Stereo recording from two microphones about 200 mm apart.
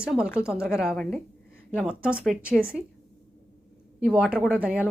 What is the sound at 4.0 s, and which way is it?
Speech, 5° right (ahead or behind).